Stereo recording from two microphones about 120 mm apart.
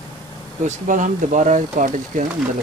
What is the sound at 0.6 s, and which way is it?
Speech, 90° right.